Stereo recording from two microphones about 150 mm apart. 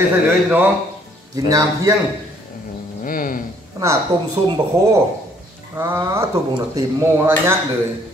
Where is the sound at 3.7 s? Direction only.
30° right (ahead or behind).